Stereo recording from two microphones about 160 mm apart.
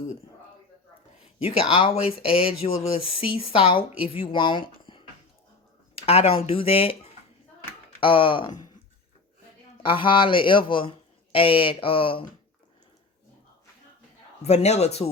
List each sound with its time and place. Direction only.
1.4 s speech: 35° left (ahead or behind)
9.8 s speech: 30° left (ahead or behind)
14.4 s speech: 45° left (ahead or behind)